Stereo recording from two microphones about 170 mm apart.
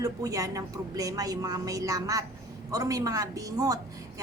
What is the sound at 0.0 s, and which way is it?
A woman's voice, 20° right (ahead or behind).